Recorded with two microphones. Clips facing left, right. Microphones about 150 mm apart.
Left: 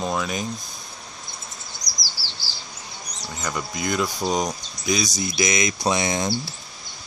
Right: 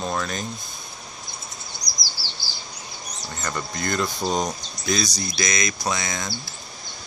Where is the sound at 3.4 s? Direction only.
10° left (ahead or behind); by 6.3 s 30° left (ahead or behind).